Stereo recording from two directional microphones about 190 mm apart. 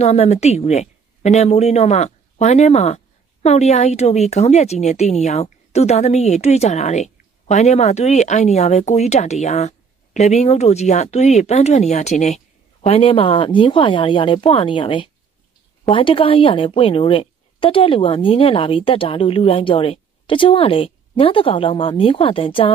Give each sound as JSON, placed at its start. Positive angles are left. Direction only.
{"t": 0.0, "sound": "a woman's voice", "side_deg": 35}